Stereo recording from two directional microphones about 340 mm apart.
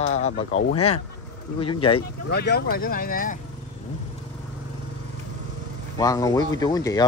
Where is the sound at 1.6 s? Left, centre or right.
Centre.